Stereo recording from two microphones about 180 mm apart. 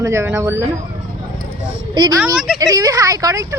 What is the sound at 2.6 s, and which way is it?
Speech, 20° right (ahead or behind).